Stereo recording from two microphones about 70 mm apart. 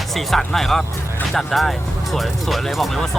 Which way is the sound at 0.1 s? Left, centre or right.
Centre.